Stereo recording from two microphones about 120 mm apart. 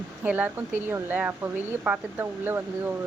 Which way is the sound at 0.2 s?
15° right (ahead or behind).